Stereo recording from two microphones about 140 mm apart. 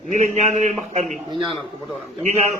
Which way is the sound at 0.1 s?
60° right (ahead or behind).